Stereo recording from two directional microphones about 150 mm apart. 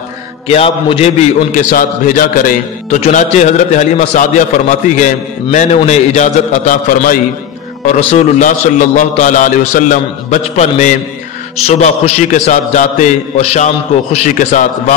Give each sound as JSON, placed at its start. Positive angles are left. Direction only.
{"t": 0.5, "sound": "a man's voice", "side_deg": 40}
{"t": 1.5, "sound": "a man's voice", "side_deg": 60}
{"t": 3.0, "sound": "a man's voice", "side_deg": 55}